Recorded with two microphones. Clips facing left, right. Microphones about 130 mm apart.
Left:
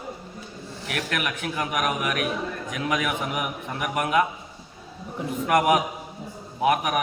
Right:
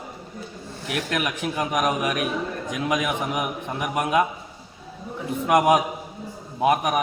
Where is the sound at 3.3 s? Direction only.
30° right (ahead or behind).